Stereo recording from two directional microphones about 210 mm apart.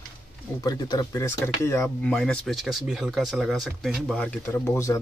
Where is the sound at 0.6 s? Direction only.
20° left (ahead or behind).